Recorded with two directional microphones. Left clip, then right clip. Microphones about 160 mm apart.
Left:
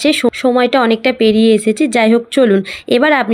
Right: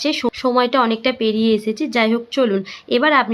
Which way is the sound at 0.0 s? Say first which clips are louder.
Left 7 dB; 30° left (ahead or behind).